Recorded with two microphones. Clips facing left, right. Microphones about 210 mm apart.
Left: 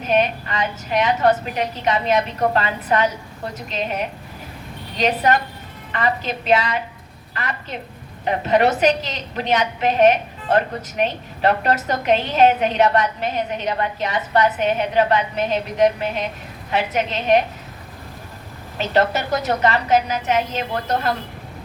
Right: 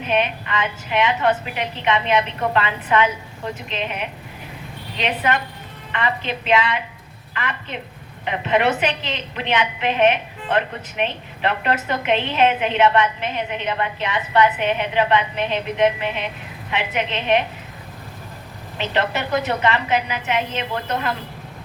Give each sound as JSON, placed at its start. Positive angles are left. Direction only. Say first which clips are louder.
{"t": 0.0, "sound": "a woman's voice", "louder": "left 2 dB", "side_deg": 40}
{"t": 18.8, "sound": "a woman's voice", "louder": "left 4 dB", "side_deg": 40}